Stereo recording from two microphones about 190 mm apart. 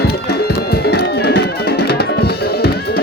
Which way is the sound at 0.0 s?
55° left (ahead or behind).